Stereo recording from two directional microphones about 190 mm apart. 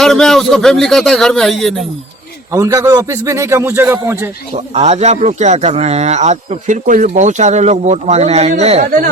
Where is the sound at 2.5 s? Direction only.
15° right (ahead or behind).